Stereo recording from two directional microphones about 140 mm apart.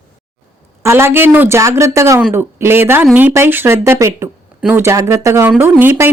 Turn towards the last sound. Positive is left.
turn(degrees=-15)  # may be behind; listen again after turning